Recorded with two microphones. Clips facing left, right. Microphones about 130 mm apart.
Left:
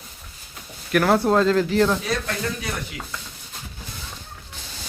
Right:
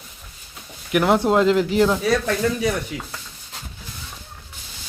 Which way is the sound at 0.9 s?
20° right (ahead or behind).